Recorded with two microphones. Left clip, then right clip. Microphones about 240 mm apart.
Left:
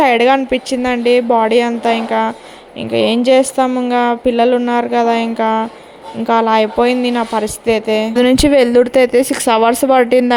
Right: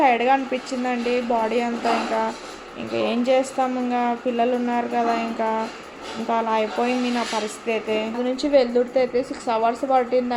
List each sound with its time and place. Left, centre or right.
0.0 s speech: left
2.9 s a woman's voice: left